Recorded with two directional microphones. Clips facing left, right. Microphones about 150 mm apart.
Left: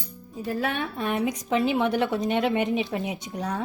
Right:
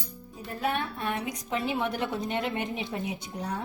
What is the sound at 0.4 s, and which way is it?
A woman's voice, 90° left.